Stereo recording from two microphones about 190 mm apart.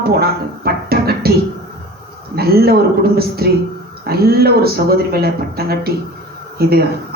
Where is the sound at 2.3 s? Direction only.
55° right (ahead or behind).